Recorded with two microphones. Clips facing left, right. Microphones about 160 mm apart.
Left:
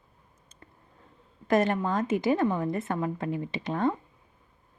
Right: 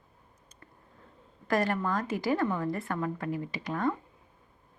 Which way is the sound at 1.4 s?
20° left (ahead or behind).